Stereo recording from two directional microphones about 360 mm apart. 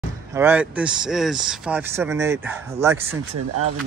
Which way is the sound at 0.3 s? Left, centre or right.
Centre.